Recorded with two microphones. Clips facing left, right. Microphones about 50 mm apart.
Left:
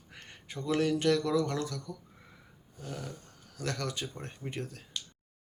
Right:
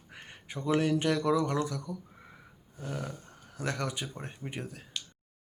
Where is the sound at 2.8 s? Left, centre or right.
Right.